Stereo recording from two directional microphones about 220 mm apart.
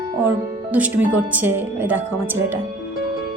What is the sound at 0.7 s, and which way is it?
Speech, 5° right (ahead or behind).